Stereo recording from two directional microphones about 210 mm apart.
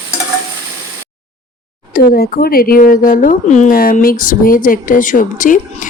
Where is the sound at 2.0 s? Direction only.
45° left (ahead or behind).